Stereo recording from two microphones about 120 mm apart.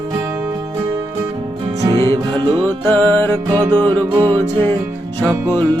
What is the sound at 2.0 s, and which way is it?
Music, 45° right (ahead or behind).